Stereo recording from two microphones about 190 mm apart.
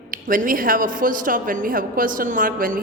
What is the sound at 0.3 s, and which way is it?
A woman's voice, 45° right (ahead or behind).